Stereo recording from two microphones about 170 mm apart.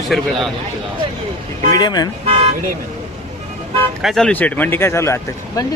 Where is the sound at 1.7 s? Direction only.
25° left (ahead or behind).